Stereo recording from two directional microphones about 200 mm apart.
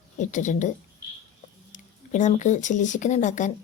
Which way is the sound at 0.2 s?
40° left (ahead or behind).